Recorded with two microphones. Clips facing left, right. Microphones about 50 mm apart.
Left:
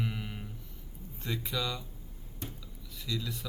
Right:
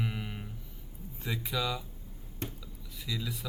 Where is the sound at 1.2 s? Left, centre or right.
Centre.